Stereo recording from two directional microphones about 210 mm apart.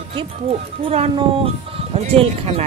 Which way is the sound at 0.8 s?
25° right (ahead or behind).